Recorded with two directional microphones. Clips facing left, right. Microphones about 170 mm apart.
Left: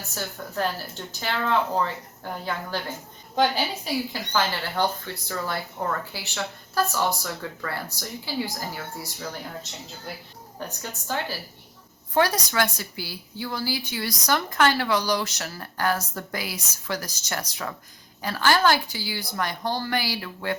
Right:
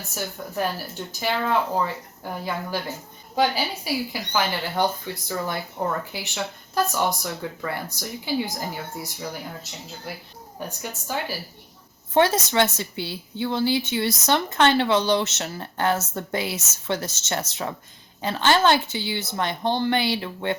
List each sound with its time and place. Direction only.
0.1 s a woman's voice: 15° right (ahead or behind)
10.6 s speech: 10° right (ahead or behind)
12.1 s a woman's voice: 25° right (ahead or behind)